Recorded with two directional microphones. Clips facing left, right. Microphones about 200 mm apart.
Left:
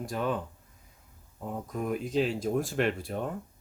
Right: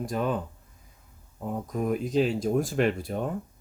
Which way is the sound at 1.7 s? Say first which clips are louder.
Right 4 dB; 40° right (ahead or behind).